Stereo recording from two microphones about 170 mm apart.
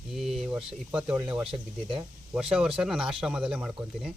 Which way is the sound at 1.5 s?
30° right (ahead or behind).